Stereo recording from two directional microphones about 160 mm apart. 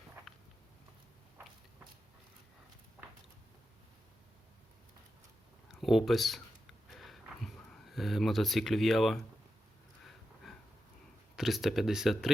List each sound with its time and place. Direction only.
5.8 s speech: centre (ahead or behind)
6.9 s a sound: centre (ahead or behind)
11.3 s speech: centre (ahead or behind)